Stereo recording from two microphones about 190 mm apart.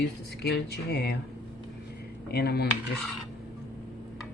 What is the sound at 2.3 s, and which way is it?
Speech, 55° left (ahead or behind).